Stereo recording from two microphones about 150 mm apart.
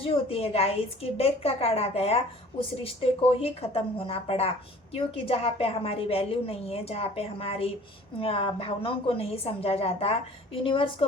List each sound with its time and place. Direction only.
0.0 s a woman's voice: 40° left (ahead or behind)